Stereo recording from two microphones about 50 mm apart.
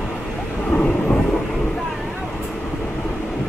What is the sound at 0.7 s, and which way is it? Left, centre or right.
Train, left.